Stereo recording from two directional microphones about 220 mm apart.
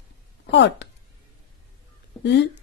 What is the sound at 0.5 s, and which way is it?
Speech, 50° left (ahead or behind).